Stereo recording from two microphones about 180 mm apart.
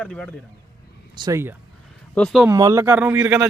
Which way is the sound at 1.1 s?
20° right (ahead or behind).